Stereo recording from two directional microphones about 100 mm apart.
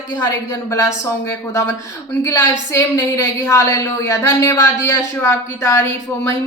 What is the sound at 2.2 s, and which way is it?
A woman's voice, 30° left (ahead or behind).